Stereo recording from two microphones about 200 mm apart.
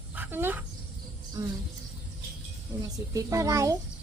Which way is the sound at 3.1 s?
15° right (ahead or behind).